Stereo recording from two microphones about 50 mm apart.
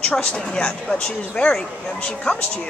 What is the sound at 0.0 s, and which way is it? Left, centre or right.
A woman's voice, centre.